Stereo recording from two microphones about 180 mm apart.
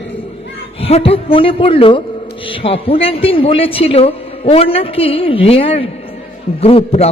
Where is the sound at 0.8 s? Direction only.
35° left (ahead or behind).